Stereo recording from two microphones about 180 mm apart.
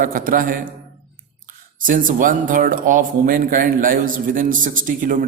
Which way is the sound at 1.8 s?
50° right (ahead or behind).